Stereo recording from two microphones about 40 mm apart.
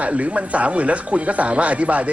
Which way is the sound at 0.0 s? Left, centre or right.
Right.